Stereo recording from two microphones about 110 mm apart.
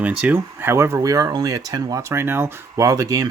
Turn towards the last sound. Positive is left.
turn(degrees=-30)  # may be behind; listen again after turning